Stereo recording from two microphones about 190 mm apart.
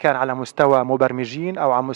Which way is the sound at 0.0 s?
15° right (ahead or behind).